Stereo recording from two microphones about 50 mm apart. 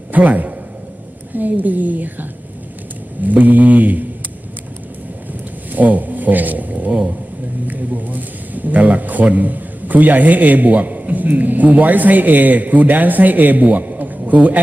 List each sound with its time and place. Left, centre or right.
0.1 s a man's voice: right
3.2 s a man's voice: right
5.7 s a sound: right
7.7 s a man's voice: right